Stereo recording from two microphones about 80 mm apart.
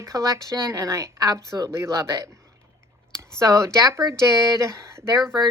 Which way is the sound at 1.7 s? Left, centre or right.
Right.